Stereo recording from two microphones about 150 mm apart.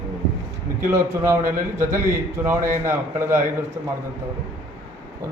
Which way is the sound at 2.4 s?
20° right (ahead or behind).